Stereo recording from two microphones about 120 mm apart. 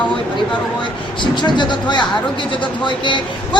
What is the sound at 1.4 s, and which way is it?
A woman's voice, 40° left (ahead or behind).